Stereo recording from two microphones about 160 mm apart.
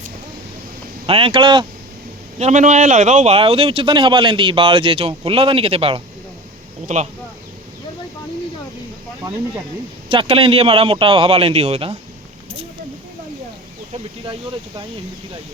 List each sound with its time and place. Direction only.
1.0 s a man's voice: 35° right (ahead or behind)
2.4 s a man's voice: 50° right (ahead or behind)
6.8 s speech: 45° right (ahead or behind)
10.1 s a man's voice: 35° right (ahead or behind)